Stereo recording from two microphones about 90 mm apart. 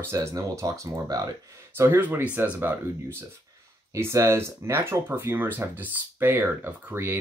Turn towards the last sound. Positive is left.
turn(degrees=-25)  # may be behind; listen again after turning